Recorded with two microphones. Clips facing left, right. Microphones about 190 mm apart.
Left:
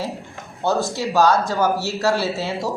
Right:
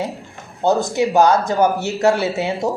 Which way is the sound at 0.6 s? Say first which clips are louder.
Right 5 dB; 15° right (ahead or behind).